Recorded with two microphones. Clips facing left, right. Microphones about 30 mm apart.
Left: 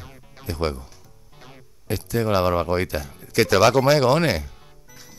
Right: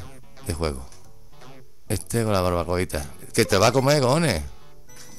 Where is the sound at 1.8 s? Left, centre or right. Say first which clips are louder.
Left 2 dB; centre.